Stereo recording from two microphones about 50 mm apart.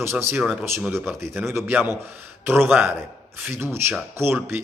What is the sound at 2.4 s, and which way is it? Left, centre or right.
A man's voice, right.